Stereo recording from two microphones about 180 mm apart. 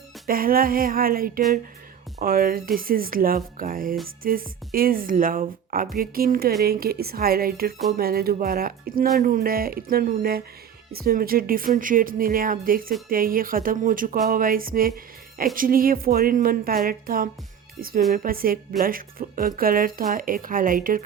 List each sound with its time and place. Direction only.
0.3 s speech: 55° right (ahead or behind)